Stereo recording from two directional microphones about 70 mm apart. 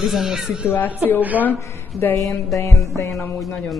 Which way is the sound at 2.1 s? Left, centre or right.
Left.